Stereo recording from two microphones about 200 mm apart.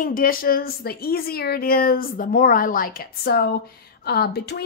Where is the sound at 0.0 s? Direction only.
45° left (ahead or behind).